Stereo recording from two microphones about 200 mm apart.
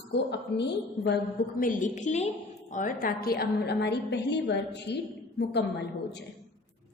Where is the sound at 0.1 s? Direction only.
60° left (ahead or behind).